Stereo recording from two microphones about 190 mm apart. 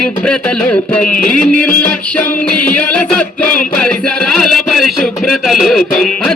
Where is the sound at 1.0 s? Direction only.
45° left (ahead or behind).